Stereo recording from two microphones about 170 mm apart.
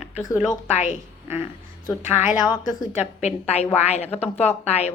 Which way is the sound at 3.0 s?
40° left (ahead or behind).